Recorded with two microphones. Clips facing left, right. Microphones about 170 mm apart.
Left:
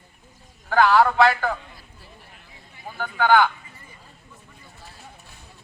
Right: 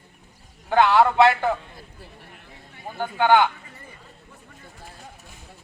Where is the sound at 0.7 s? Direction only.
25° right (ahead or behind).